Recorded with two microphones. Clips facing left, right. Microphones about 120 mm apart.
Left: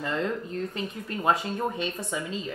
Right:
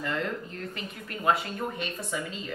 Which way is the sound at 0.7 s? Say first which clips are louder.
Left 5 dB; 25° left (ahead or behind).